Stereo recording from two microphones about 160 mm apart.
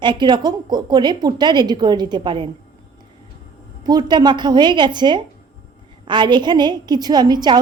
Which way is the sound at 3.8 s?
25° right (ahead or behind).